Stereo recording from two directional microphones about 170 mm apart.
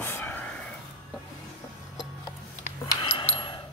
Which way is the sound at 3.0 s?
30° left (ahead or behind).